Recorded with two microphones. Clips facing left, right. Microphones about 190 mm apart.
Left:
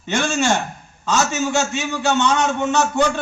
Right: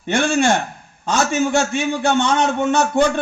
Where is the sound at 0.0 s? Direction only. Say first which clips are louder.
Right 3 dB; 55° right (ahead or behind).